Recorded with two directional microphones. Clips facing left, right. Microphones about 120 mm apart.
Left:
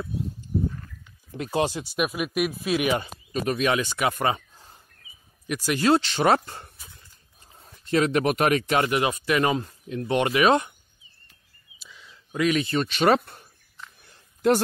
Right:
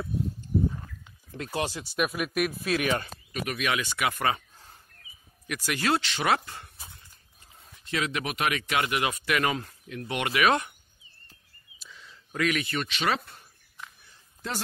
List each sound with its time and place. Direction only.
1.3 s speech: 20° left (ahead or behind)
3.3 s speech: 30° left (ahead or behind)
6.8 s dog: 25° right (ahead or behind)
7.5 s speech: 40° left (ahead or behind)
11.8 s a sound: 5° left (ahead or behind)
12.4 s speech: 25° left (ahead or behind)
12.8 s speech: 45° left (ahead or behind)
14.0 s a sound: 60° left (ahead or behind)